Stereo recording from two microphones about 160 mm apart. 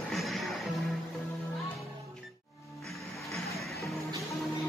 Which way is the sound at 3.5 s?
Centre (ahead or behind).